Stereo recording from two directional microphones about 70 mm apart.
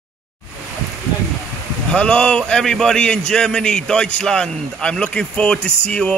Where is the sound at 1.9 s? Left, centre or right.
Centre.